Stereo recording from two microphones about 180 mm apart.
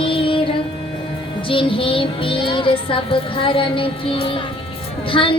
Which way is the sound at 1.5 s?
30° left (ahead or behind).